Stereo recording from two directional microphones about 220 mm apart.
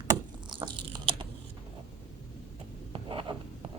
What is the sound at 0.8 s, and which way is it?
Biting, 25° right (ahead or behind).